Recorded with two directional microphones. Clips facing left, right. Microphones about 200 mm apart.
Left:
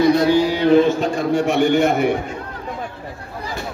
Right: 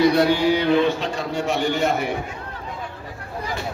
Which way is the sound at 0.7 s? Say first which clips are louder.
Left 5 dB; 45° left (ahead or behind).